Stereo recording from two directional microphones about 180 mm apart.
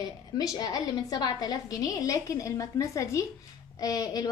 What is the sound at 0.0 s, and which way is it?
Speech, 20° left (ahead or behind).